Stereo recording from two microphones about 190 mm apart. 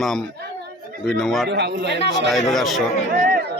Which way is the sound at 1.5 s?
60° right (ahead or behind).